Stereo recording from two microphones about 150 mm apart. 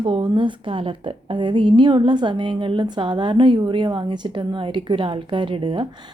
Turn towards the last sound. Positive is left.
turn(degrees=-35)  # may be behind; listen again after turning